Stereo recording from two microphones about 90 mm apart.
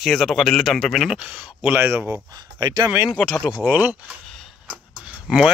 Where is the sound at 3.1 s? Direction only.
10° left (ahead or behind).